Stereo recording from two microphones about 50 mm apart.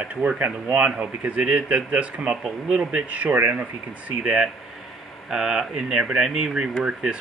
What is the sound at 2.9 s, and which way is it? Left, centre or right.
Speech, right.